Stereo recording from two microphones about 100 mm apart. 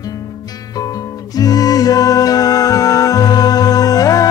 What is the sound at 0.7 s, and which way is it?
Music, 40° left (ahead or behind).